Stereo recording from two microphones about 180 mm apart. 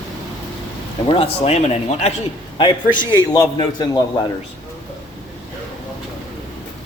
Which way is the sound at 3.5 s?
20° left (ahead or behind).